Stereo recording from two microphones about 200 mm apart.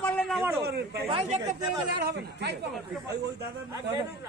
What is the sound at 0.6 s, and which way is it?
Speech, 50° right (ahead or behind).